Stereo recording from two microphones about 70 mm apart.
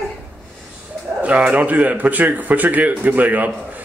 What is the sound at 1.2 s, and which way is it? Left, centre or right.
A man's voice, right.